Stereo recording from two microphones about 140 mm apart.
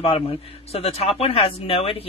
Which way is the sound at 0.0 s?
45° left (ahead or behind).